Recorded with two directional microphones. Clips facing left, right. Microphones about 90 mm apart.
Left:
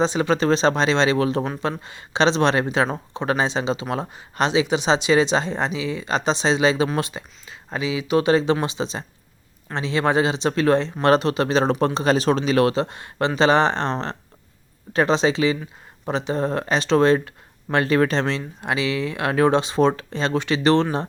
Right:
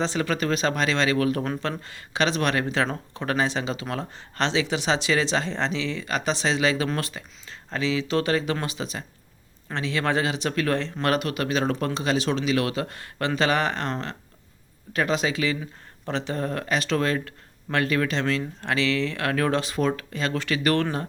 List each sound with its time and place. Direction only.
0.0 s speech: 20° left (ahead or behind)
11.1 s speech: 30° left (ahead or behind)
18.3 s speech: 15° left (ahead or behind)